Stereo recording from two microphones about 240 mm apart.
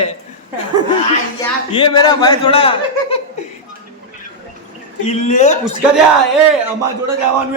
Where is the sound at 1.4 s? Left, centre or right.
Centre.